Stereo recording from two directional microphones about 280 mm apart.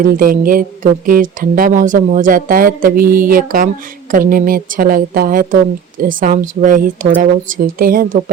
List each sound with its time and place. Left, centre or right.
0.0 s a woman's voice: right